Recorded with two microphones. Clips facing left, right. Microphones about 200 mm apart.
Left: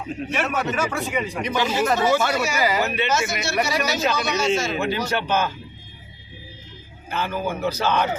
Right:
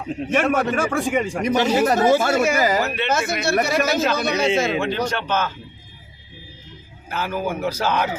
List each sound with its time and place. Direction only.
0.3 s a man's voice: 50° right (ahead or behind)
2.8 s speech: centre (ahead or behind)
3.1 s a man's voice: 60° right (ahead or behind)
5.0 s speech: 10° left (ahead or behind)
7.1 s speech: 5° right (ahead or behind)